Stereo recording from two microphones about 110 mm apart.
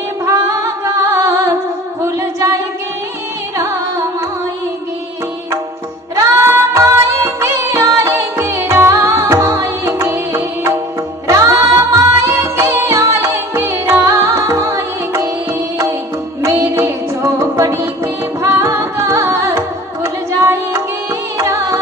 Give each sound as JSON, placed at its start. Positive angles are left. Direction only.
{"t": 1.1, "sound": "music", "side_deg": -30}
{"t": 2.0, "sound": "singing", "side_deg": -30}
{"t": 6.1, "sound": "music", "side_deg": -25}
{"t": 16.4, "sound": "music", "side_deg": -25}